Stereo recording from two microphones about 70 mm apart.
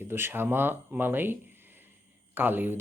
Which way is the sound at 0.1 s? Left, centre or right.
Right.